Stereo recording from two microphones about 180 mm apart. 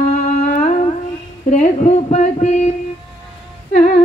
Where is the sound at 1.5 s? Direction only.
40° left (ahead or behind).